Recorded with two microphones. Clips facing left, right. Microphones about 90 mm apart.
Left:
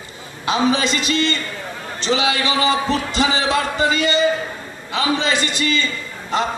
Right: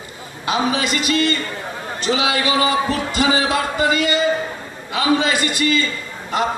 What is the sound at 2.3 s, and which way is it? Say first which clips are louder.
A man's voice: right 1 dB; 25° left (ahead or behind).